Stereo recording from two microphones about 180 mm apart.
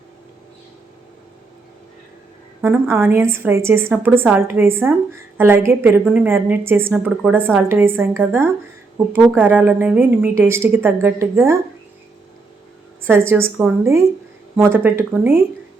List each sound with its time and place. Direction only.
2.6 s a woman's voice: 15° right (ahead or behind)
13.0 s a woman's voice: 15° right (ahead or behind)